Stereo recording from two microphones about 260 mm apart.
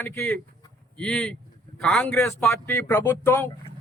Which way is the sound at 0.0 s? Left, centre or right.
Centre.